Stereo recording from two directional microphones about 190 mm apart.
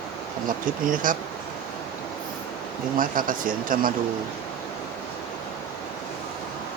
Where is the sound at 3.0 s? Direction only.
45° right (ahead or behind).